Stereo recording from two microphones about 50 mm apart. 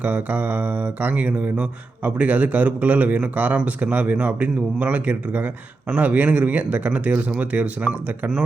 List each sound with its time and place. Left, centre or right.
0.0 s speech: right